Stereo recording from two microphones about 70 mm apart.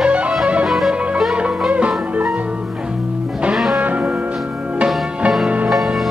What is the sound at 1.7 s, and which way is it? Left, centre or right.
Music, centre.